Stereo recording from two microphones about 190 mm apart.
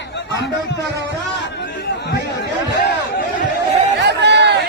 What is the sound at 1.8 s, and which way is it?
Chatter, 60° left (ahead or behind).